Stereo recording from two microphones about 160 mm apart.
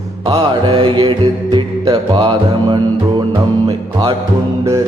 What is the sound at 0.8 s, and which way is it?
Music, 30° right (ahead or behind).